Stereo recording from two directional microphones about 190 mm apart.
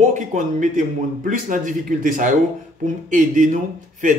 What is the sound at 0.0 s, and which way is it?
A man's voice, 40° right (ahead or behind).